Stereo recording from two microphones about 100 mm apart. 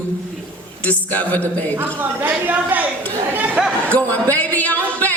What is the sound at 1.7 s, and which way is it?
A woman's voice, 20° right (ahead or behind).